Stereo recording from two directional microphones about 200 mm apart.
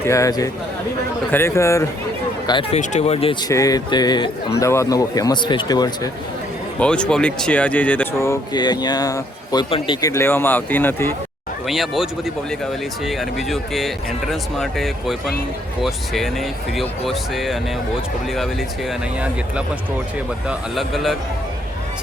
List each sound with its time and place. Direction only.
0.0 s speech: 15° left (ahead or behind)
2.5 s speech: 30° left (ahead or behind)
3.5 s speech: 15° left (ahead or behind)
6.7 s speech: 5° left (ahead or behind)
11.7 s speech: centre (ahead or behind)
13.1 s speech: centre (ahead or behind)
20.5 s speech: centre (ahead or behind)